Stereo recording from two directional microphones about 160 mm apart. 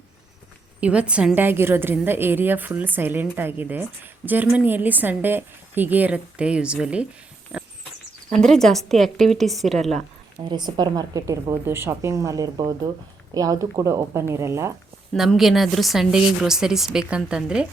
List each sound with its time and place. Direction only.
0.8 s a woman's voice: 10° right (ahead or behind)
7.5 s a sound: 5° right (ahead or behind)
8.3 s speech: centre (ahead or behind)
10.5 s a woman's voice: 25° right (ahead or behind)
15.1 s speech: centre (ahead or behind)